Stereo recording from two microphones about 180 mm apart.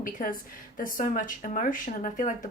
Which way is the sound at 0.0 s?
50° left (ahead or behind).